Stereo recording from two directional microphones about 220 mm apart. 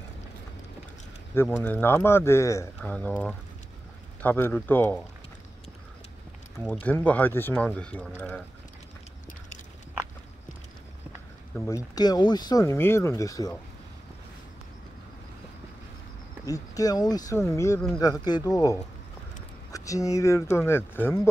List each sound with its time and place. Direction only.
1.3 s speech: 10° left (ahead or behind)
6.7 s speech: 5° left (ahead or behind)
11.6 s speech: 15° left (ahead or behind)
16.4 s speech: 15° left (ahead or behind)